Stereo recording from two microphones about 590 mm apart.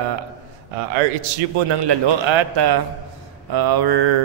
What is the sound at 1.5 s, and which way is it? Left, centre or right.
A man's voice, right.